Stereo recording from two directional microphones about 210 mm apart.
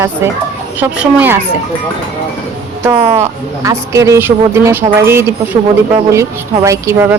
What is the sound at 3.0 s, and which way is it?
Speech, 15° right (ahead or behind).